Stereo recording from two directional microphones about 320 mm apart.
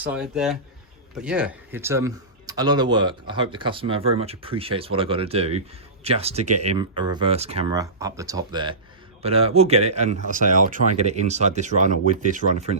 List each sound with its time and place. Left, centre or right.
0.0 s speech: centre; by 12.7 s right